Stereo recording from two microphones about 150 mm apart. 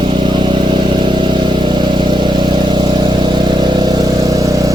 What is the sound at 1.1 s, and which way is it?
Vehicle, 30° right (ahead or behind).